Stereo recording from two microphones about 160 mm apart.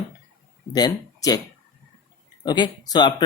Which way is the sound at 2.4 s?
25° left (ahead or behind).